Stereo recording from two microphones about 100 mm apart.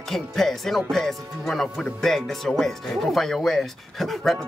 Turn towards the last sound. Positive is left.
turn(degrees=0)  # may be behind; listen again after turning